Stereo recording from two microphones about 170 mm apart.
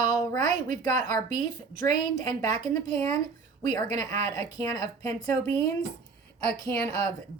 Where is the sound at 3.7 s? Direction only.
20° left (ahead or behind).